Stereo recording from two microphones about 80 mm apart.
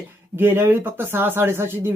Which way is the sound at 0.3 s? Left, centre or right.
Right.